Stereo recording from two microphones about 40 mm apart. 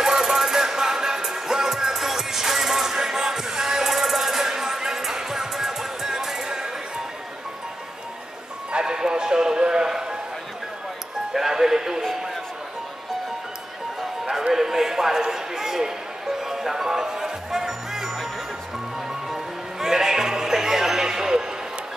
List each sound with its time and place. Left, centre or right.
0.0 s music: centre
8.7 s music: centre
11.3 s music: centre
14.2 s music: centre
14.5 s a sound: centre
19.2 s music: centre